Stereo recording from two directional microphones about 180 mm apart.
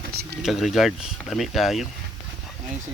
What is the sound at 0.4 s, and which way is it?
Speech, centre (ahead or behind).